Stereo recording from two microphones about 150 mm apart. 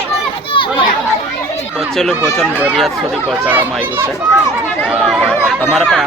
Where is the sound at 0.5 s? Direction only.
35° left (ahead or behind).